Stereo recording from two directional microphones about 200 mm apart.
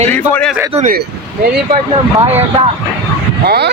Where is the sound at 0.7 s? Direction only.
40° right (ahead or behind).